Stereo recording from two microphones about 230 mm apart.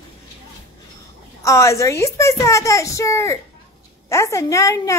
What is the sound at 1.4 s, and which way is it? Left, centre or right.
A woman's voice, centre.